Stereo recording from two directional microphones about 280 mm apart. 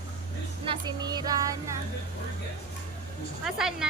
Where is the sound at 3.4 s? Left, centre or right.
Centre.